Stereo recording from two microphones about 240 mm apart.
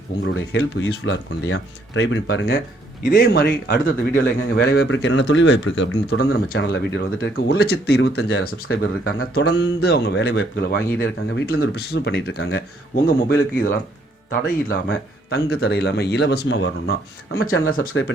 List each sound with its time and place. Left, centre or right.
0.3 s speech: left
8.6 s speech: left
17.3 s speech: left